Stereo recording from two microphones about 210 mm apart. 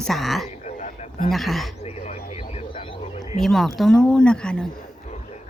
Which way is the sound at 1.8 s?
30° left (ahead or behind).